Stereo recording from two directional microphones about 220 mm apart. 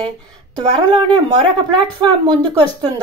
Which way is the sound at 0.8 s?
20° right (ahead or behind).